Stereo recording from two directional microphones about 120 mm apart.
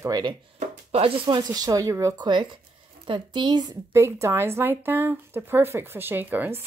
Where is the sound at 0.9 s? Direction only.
50° right (ahead or behind); by 2.3 s 25° right (ahead or behind).